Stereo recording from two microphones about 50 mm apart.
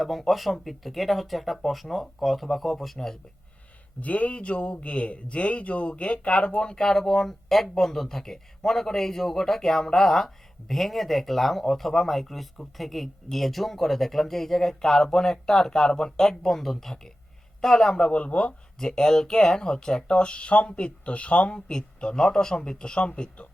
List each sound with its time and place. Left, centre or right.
0.0 s speech: centre
4.0 s speech: left
18.8 s speech: centre